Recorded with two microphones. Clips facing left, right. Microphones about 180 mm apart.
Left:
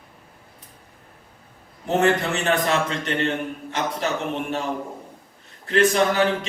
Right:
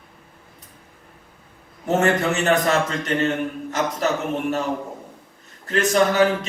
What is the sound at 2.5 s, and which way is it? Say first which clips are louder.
A man's voice: right 1 dB; 40° right (ahead or behind).